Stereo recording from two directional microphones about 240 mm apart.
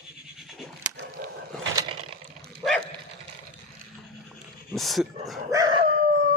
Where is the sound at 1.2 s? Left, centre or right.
Right.